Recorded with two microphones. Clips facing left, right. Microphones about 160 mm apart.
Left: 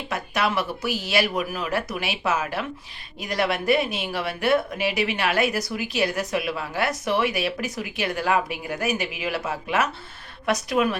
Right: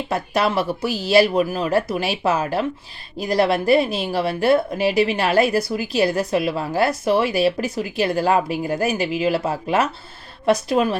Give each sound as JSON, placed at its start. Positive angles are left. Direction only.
{"t": 0.1, "sound": "a woman's voice", "side_deg": -35}